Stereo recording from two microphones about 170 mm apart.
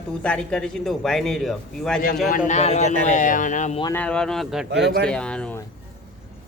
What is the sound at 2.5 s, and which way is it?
A man's voice, 40° left (ahead or behind).